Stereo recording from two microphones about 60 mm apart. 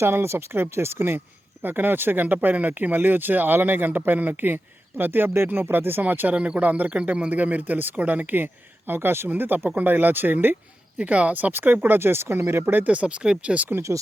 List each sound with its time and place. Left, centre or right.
0.0 s speech: right
6.3 s speech: centre; by 9.3 s right
9.3 s speech: right
10.9 s speech: right